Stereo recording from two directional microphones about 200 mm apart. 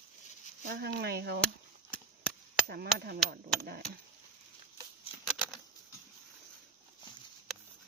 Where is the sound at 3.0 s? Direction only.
50° right (ahead or behind).